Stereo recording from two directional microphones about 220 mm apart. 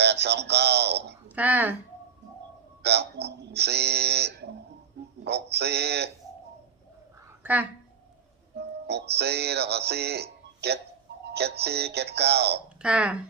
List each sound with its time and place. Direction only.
0.0 s speech: 50° right (ahead or behind)
1.4 s speech: 5° right (ahead or behind)
2.8 s speech: 50° right (ahead or behind)
7.4 s speech: 5° right (ahead or behind)
8.5 s speech: 50° right (ahead or behind)
12.8 s speech: 5° right (ahead or behind)